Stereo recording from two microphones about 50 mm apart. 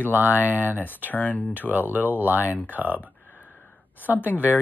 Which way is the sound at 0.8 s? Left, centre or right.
Left.